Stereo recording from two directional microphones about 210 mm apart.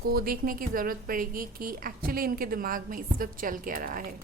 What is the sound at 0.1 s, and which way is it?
A woman's voice, 45° right (ahead or behind).